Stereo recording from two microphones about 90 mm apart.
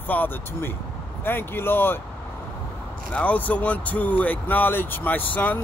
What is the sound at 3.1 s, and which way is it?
Speech, 15° left (ahead or behind).